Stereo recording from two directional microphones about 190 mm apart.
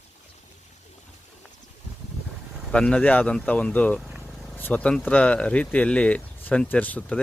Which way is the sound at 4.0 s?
Centre (ahead or behind).